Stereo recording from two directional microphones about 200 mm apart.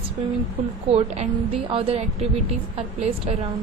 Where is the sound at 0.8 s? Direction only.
30° right (ahead or behind).